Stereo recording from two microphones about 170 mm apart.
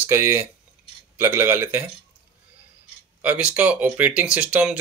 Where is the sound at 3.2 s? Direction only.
10° right (ahead or behind).